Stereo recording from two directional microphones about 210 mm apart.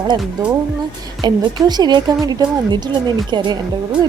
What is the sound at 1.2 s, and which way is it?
Speech, 20° right (ahead or behind).